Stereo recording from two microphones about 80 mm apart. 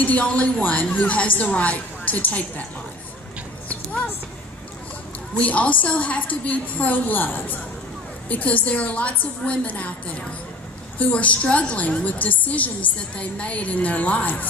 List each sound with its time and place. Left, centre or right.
0.0 s a woman's voice: centre
5.4 s a woman's voice: centre